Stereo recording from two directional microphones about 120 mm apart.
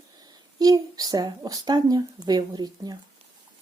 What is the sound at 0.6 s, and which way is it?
Speech, 30° right (ahead or behind).